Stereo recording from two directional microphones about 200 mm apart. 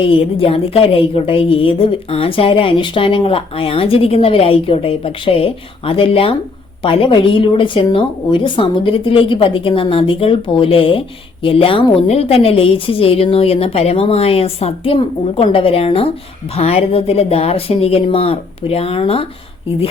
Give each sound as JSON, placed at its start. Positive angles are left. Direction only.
{"t": 0.0, "sound": "a woman's voice", "side_deg": 25}